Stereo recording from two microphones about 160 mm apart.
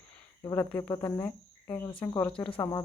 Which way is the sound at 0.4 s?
15° left (ahead or behind).